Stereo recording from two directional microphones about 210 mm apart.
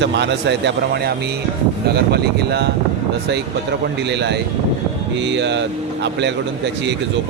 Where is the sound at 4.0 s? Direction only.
55° right (ahead or behind).